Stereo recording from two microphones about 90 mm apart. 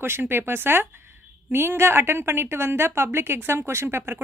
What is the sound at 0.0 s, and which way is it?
Speech, 25° right (ahead or behind).